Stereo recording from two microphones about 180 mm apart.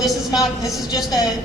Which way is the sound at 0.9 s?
20° left (ahead or behind).